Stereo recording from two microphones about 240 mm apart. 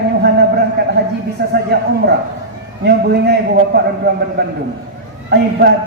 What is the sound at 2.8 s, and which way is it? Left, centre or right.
A woman's voice, right.